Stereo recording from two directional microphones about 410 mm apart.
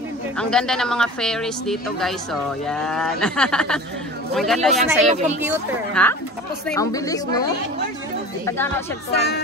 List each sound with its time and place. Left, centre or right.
0.4 s speech: centre
5.1 s speech: centre
6.0 s speech: centre
8.5 s speech: centre
9.1 s speech: left